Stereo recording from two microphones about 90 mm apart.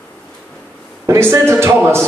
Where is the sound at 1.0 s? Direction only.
30° right (ahead or behind).